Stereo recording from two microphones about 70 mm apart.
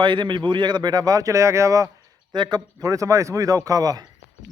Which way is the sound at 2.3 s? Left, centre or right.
Right.